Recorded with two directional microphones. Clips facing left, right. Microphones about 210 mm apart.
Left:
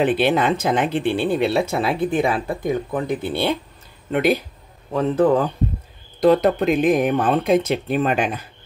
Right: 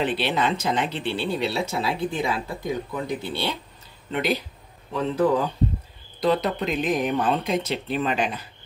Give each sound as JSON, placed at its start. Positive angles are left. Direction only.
{"t": 0.0, "sound": "speech", "side_deg": 50}